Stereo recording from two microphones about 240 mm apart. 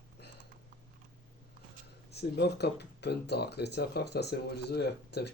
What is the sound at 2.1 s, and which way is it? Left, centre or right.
Speech, left.